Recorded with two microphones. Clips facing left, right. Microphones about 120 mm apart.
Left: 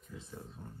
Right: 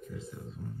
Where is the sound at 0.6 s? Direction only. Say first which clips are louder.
Right 7 dB; 25° left (ahead or behind).